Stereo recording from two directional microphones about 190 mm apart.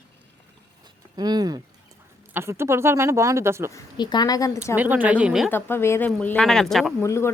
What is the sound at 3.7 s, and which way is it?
Speech, 20° left (ahead or behind).